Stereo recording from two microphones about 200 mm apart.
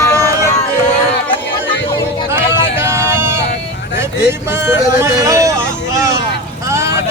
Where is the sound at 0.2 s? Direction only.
15° right (ahead or behind).